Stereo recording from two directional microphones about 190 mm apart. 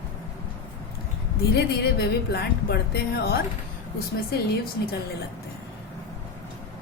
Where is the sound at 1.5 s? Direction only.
60° left (ahead or behind).